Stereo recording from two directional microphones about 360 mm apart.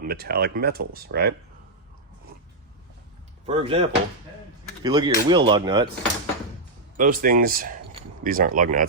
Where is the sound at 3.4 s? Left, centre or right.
Centre.